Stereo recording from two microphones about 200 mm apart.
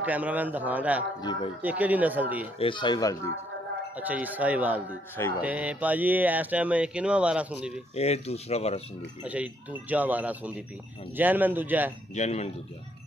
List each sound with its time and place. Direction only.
0.0 s speech: 5° right (ahead or behind)
1.2 s speech: 20° left (ahead or behind)
1.6 s speech: 5° right (ahead or behind)
2.6 s speech: 25° left (ahead or behind)
3.9 s speech: 10° right (ahead or behind)
5.1 s speech: 10° left (ahead or behind)
5.4 s speech: 5° right (ahead or behind)
7.9 s speech: 30° left (ahead or behind)
9.2 s speech: 5° right (ahead or behind)
12.2 s speech: 35° left (ahead or behind)